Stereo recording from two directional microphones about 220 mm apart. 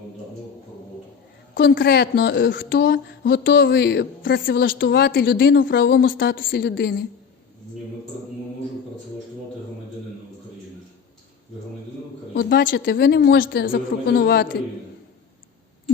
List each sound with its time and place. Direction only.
1.5 s speech: 55° left (ahead or behind)
12.3 s speech: 45° left (ahead or behind)